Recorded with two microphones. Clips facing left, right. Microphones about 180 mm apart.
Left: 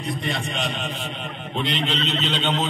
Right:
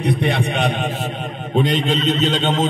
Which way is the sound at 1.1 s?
45° right (ahead or behind).